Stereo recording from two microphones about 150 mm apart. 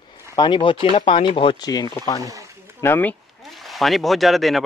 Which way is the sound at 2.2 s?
20° right (ahead or behind).